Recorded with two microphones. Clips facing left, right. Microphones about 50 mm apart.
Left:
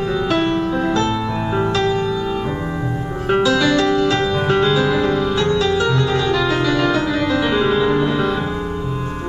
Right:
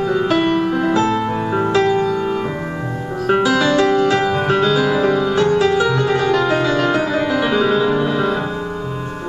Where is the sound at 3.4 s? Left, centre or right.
Right.